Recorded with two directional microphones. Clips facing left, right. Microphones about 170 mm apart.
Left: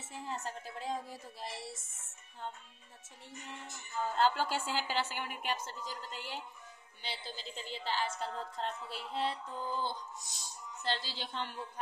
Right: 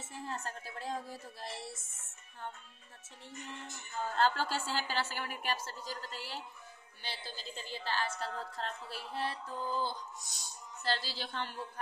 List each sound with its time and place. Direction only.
0.1 s a woman's voice: 15° left (ahead or behind)
4.1 s a woman's voice: 15° left (ahead or behind)